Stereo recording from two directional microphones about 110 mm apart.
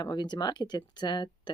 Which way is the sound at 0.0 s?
40° left (ahead or behind).